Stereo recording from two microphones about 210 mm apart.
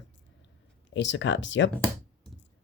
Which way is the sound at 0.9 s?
60° left (ahead or behind).